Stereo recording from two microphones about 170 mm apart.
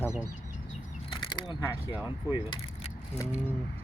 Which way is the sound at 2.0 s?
25° left (ahead or behind).